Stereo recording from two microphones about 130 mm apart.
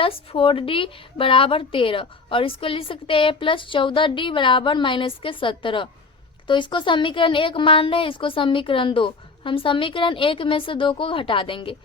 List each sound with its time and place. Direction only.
0.0 s a woman's voice: 45° left (ahead or behind)